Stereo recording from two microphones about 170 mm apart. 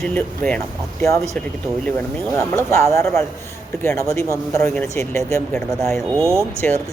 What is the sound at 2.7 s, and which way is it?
Speech, 15° left (ahead or behind).